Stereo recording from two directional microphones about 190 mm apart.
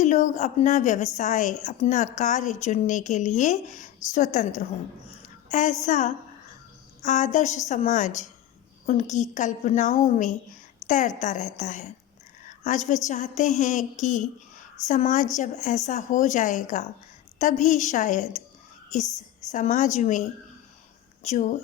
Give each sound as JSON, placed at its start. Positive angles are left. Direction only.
{"t": 0.0, "sound": "a woman's voice", "side_deg": 40}
{"t": 5.2, "sound": "a sound", "side_deg": 40}
{"t": 5.8, "sound": "a woman's voice", "side_deg": 40}
{"t": 19.5, "sound": "a woman's voice", "side_deg": 40}
{"t": 21.2, "sound": "a woman's voice", "side_deg": 40}